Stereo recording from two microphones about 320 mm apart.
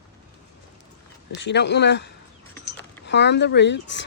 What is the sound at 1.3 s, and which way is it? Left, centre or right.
Speech, left.